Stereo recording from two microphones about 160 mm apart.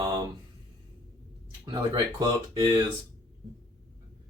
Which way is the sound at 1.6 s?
25° right (ahead or behind).